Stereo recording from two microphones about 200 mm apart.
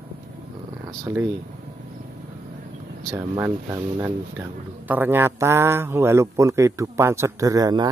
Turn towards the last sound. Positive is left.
turn(degrees=-20)  # may be behind; listen again after turning